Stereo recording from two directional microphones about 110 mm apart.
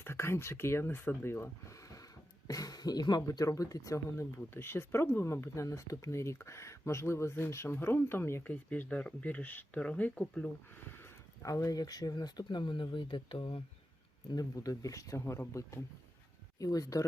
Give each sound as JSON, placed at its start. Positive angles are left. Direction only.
{"t": 0.0, "sound": "speech", "side_deg": 25}
{"t": 14.3, "sound": "speech", "side_deg": 35}